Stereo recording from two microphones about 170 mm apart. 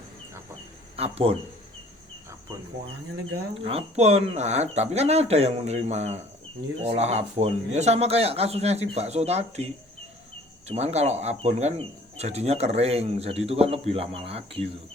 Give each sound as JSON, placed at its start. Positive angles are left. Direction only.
{"t": 0.9, "sound": "speech", "side_deg": -35}
{"t": 3.6, "sound": "speech", "side_deg": -35}